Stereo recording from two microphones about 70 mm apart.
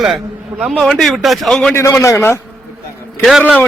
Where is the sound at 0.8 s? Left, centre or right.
Centre.